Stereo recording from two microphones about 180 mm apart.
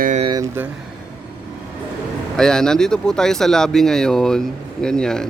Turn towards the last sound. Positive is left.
turn(degrees=5)  # may be behind; listen again after turning